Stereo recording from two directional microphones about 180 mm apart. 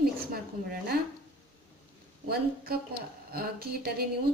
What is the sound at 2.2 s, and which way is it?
Speech, 60° right (ahead or behind).